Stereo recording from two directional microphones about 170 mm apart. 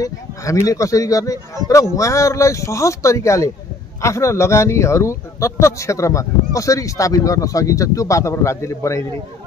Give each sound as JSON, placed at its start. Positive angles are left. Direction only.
{"t": 0.0, "sound": "speech", "side_deg": 20}